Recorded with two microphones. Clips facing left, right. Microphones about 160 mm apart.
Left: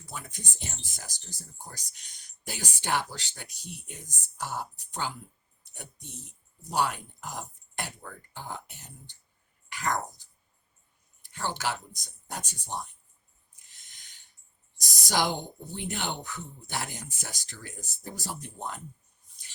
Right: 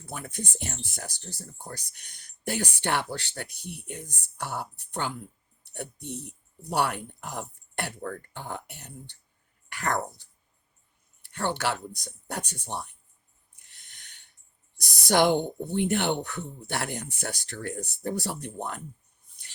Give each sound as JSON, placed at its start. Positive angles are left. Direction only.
{"t": 0.0, "sound": "speech", "side_deg": -60}
{"t": 13.7, "sound": "a sound", "side_deg": -65}
{"t": 15.0, "sound": "speech", "side_deg": -60}